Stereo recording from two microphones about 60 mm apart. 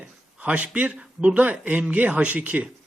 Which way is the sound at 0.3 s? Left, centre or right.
Right.